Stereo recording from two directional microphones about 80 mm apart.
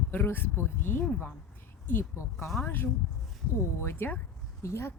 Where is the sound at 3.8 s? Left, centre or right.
Left.